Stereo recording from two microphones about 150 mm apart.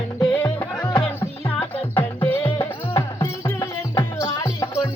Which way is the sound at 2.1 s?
10° left (ahead or behind).